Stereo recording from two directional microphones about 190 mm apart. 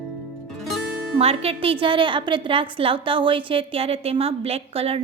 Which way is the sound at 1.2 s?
30° right (ahead or behind).